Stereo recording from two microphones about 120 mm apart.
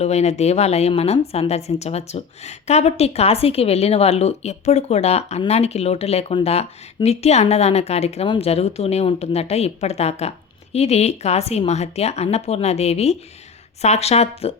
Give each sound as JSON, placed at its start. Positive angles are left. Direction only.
{"t": 0.0, "sound": "a woman's voice", "side_deg": 65}